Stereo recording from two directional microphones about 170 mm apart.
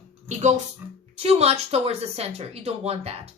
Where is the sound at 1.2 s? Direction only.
40° right (ahead or behind).